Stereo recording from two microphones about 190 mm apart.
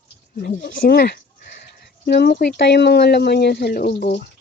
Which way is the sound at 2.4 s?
60° left (ahead or behind).